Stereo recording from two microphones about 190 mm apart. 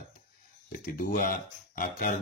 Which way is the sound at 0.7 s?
45° left (ahead or behind).